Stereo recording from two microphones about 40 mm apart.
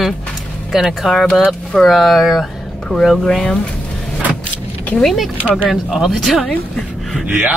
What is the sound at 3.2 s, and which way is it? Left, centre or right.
Speech, centre.